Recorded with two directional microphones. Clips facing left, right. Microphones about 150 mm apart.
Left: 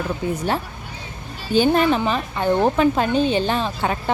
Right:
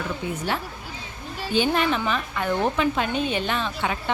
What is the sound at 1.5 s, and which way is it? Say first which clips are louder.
A woman's voice: left 6 dB; 40° left (ahead or behind).